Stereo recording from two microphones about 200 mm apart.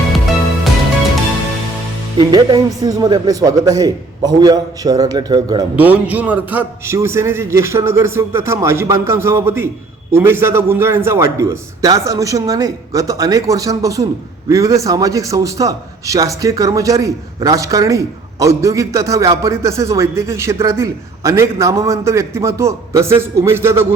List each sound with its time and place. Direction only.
2.1 s speech: 20° right (ahead or behind)
5.7 s a man's voice: 10° right (ahead or behind)